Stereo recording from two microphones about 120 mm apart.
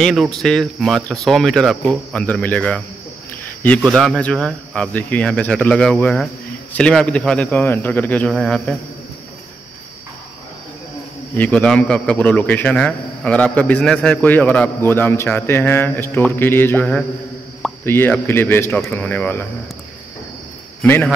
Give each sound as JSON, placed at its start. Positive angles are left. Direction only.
{"t": 0.0, "sound": "a man's voice", "side_deg": 0}
{"t": 11.3, "sound": "a man's voice", "side_deg": 10}
{"t": 20.8, "sound": "a man's voice", "side_deg": 15}